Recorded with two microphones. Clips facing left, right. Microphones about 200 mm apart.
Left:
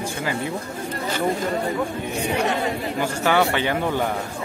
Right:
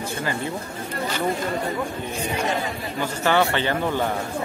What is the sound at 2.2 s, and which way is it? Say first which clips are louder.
Speech: left 3 dB; 65° left (ahead or behind).